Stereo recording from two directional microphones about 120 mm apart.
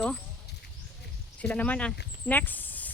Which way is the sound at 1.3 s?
10° left (ahead or behind).